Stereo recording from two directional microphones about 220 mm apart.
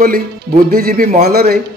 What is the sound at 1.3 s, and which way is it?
Speech, 45° right (ahead or behind).